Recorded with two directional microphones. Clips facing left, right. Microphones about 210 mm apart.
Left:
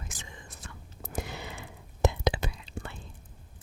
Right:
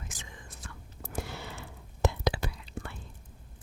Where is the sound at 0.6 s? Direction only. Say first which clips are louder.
Even; 20° left (ahead or behind).